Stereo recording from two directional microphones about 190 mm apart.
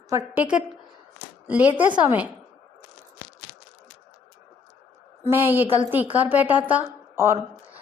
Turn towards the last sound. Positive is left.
turn(degrees=-10)  # may be behind; listen again after turning